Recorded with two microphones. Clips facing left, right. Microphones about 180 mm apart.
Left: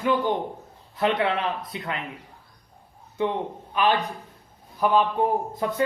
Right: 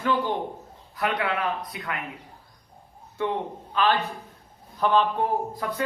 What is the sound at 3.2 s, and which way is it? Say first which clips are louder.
Speech: left 2 dB; 20° left (ahead or behind).